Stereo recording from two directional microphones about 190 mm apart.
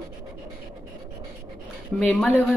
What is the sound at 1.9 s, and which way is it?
Speech, 5° left (ahead or behind).